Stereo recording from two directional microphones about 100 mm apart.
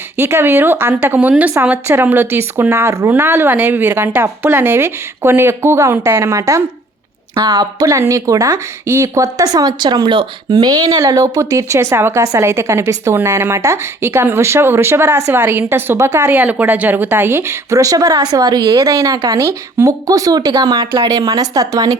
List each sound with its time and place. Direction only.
0.2 s speech: 25° right (ahead or behind)
7.3 s speech: 45° right (ahead or behind)